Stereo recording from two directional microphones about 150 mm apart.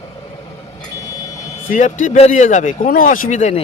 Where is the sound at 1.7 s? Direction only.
55° left (ahead or behind).